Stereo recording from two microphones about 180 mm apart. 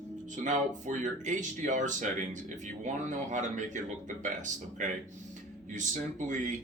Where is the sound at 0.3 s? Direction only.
45° right (ahead or behind).